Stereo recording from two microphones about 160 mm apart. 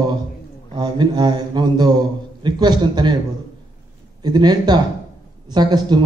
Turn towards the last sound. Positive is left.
turn(degrees=-25)  # may be behind; listen again after turning